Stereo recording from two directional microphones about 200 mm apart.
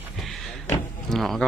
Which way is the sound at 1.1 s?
Centre (ahead or behind).